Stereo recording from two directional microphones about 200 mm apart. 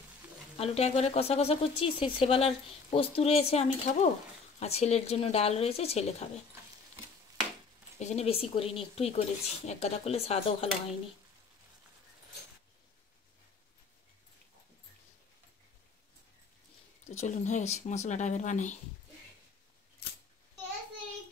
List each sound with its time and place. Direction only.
0.6 s a woman's voice: 30° left (ahead or behind)
8.0 s a woman's voice: 35° left (ahead or behind)
17.0 s a woman's voice: 35° left (ahead or behind)